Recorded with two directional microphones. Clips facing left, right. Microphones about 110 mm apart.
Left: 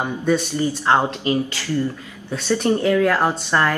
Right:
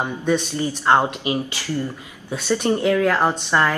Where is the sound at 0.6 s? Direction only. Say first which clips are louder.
Even; 15° right (ahead or behind).